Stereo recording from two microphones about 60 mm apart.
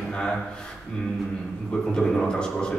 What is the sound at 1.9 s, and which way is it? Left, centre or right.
Speech, centre.